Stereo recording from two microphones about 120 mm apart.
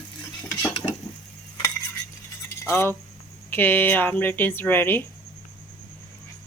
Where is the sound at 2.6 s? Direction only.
20° left (ahead or behind).